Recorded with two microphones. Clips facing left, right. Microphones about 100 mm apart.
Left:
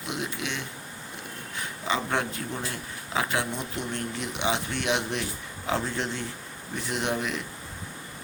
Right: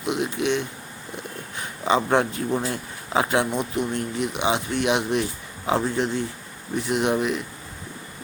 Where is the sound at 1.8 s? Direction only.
25° right (ahead or behind).